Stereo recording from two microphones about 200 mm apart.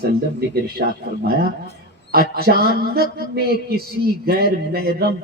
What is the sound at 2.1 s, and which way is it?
A man's voice, 50° right (ahead or behind).